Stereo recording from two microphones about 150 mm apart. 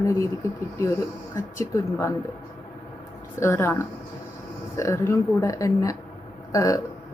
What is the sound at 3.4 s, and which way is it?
Speech, 15° left (ahead or behind).